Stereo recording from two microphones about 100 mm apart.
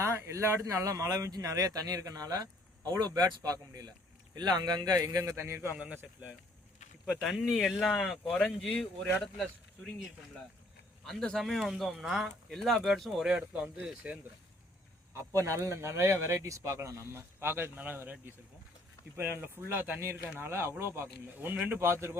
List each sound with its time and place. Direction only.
0.0 s speech: 30° right (ahead or behind)
5.7 s speech: 10° right (ahead or behind)
7.0 s speech: centre (ahead or behind)
11.0 s speech: 5° left (ahead or behind); by 14.2 s 10° right (ahead or behind)
15.1 s speech: 30° right (ahead or behind)